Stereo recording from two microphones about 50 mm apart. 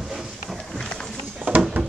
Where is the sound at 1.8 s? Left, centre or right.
Centre.